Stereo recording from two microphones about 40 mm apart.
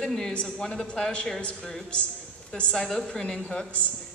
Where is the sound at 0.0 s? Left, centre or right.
Centre.